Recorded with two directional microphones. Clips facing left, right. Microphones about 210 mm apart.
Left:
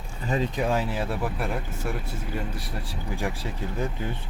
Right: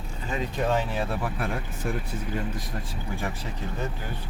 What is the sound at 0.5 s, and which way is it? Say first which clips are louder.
Speech: even; 5° left (ahead or behind).